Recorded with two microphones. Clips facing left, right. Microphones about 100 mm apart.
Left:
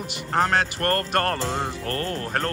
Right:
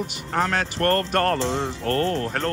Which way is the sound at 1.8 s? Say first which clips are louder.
Right 5 dB; 90° right.